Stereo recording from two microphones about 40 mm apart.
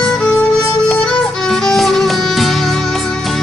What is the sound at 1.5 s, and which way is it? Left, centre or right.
Music, centre.